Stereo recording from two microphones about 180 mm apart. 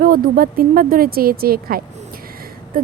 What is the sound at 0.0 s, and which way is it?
Speech, 50° right (ahead or behind).